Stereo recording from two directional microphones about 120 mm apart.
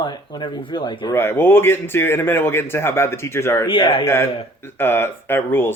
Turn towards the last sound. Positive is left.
turn(degrees=20)  # may be behind; listen again after turning